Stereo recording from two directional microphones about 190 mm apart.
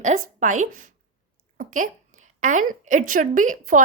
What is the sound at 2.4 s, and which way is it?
A woman's voice, 45° right (ahead or behind).